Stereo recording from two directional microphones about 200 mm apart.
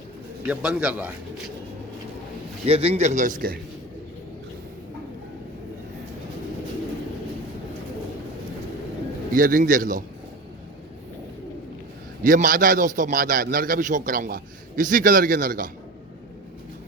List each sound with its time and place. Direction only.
0.4 s a man's voice: 5° right (ahead or behind)
2.6 s a man's voice: 30° right (ahead or behind)
9.3 s a man's voice: 45° right (ahead or behind)
12.2 s a man's voice: 45° right (ahead or behind)